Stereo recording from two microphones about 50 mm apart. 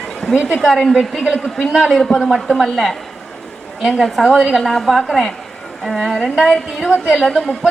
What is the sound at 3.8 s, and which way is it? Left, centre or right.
Speech, centre.